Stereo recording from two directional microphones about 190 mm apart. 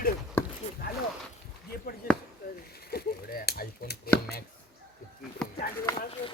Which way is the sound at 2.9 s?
55° left (ahead or behind).